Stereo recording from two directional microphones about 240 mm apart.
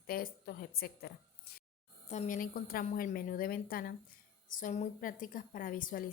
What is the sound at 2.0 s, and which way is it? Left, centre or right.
A woman's voice, left.